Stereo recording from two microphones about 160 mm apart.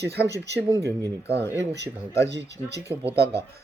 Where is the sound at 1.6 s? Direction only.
90° right.